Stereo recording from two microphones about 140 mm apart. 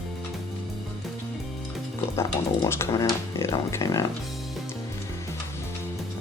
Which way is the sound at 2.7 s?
20° left (ahead or behind).